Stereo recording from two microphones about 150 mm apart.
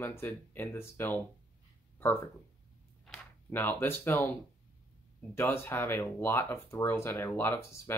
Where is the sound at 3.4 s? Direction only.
15° left (ahead or behind).